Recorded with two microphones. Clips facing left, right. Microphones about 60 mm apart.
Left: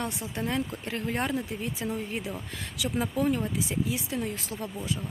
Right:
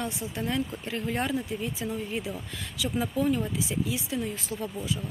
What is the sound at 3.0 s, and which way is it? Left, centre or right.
Speech, left.